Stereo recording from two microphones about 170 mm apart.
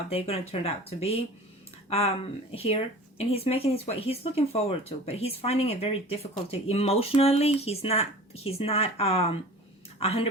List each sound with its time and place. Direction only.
0.1 s speech: 35° left (ahead or behind)